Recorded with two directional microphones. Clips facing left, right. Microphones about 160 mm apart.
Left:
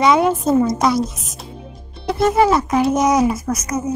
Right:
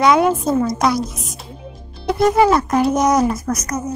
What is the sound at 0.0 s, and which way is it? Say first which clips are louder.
A woman's voice: even; centre (ahead or behind).